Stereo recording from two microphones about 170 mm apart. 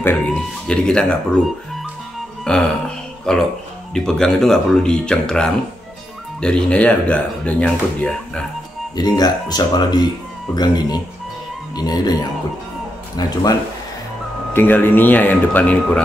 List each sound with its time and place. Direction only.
0.0 s speech: 10° left (ahead or behind)
2.5 s speech: 5° left (ahead or behind)
8.9 s speech: 25° left (ahead or behind)
14.5 s speech: 10° left (ahead or behind)